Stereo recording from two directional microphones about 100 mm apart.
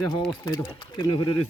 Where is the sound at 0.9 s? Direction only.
50° left (ahead or behind).